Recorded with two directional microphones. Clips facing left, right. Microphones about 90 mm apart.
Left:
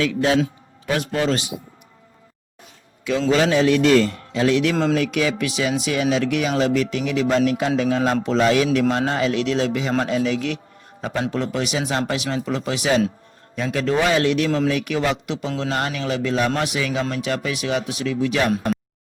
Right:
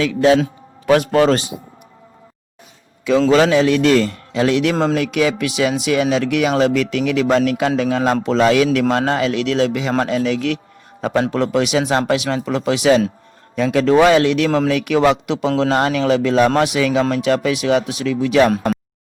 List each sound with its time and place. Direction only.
0.9 s a man's voice: 65° right (ahead or behind)
3.2 s a man's voice: 90° right
10.0 s a man's voice: 75° right (ahead or behind); by 18.2 s 90° right